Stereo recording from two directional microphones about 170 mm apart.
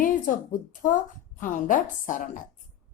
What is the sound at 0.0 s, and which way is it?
A woman's voice, 50° left (ahead or behind).